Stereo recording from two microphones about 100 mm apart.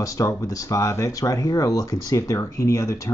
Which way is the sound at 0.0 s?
35° left (ahead or behind).